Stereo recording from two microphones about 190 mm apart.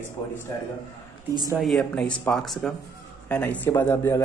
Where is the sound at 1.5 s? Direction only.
Centre (ahead or behind).